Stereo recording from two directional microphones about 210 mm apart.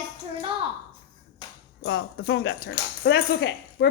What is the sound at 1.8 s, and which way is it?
Speech, 60° left (ahead or behind).